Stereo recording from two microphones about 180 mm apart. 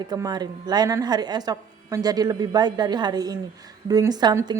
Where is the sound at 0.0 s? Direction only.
25° right (ahead or behind).